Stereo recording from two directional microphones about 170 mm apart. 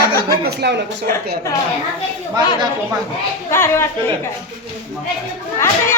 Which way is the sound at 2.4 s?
25° right (ahead or behind).